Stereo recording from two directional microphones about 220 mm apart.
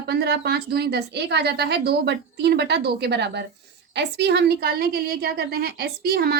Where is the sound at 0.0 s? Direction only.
50° right (ahead or behind).